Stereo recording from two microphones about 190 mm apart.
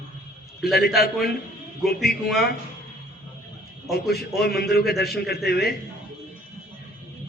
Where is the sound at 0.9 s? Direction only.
55° left (ahead or behind).